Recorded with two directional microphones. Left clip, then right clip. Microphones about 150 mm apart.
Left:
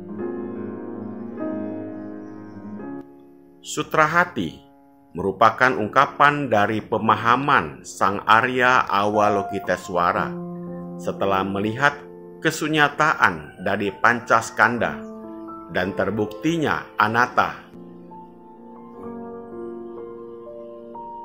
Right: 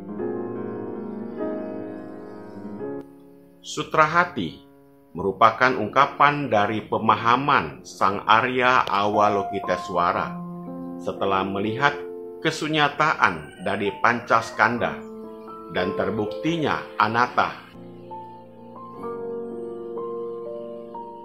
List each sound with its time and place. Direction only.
0.1 s music: centre (ahead or behind)
3.7 s a man's voice: 25° left (ahead or behind)